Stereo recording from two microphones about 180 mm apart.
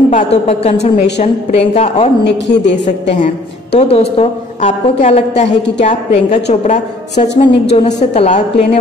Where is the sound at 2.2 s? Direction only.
75° left (ahead or behind).